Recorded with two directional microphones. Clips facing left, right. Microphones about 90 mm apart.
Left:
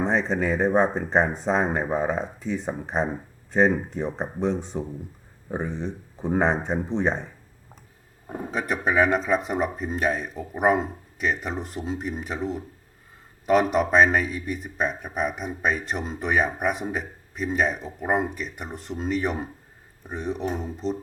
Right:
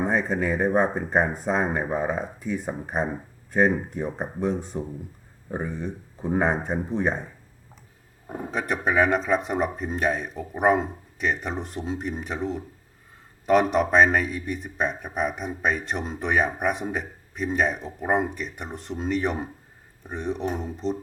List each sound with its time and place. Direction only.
0.0 s speech: 25° left (ahead or behind)
8.3 s speech: centre (ahead or behind)